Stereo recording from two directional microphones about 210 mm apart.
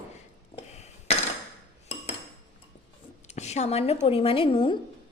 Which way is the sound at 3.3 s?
30° left (ahead or behind).